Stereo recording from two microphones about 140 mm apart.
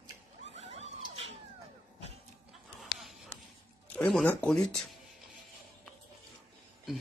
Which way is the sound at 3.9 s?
5° left (ahead or behind).